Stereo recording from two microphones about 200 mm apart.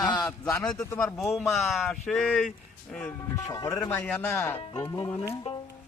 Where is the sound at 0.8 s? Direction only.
15° left (ahead or behind).